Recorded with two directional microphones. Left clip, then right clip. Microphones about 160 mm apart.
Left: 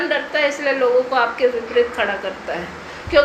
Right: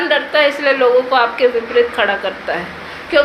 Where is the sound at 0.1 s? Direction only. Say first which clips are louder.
Right 6 dB; 15° right (ahead or behind).